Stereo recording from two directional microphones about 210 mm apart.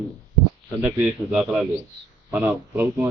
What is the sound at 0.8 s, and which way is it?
A man's voice, 10° right (ahead or behind).